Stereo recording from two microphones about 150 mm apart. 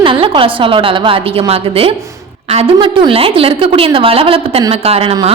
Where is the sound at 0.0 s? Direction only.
35° right (ahead or behind).